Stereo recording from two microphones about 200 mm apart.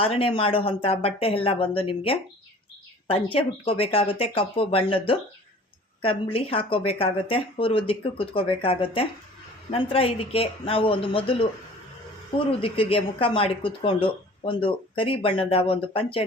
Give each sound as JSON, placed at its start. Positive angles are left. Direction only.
{"t": 0.0, "sound": "speech", "side_deg": 25}
{"t": 12.5, "sound": "speech", "side_deg": 25}